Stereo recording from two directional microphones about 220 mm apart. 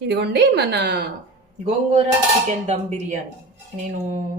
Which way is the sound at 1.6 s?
30° right (ahead or behind).